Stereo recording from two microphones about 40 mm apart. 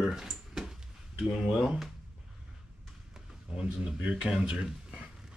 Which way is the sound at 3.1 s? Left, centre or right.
Centre.